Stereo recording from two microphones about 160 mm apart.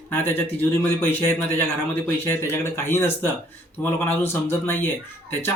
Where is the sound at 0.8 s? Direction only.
15° left (ahead or behind).